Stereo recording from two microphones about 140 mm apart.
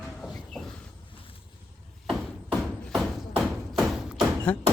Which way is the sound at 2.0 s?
Centre (ahead or behind).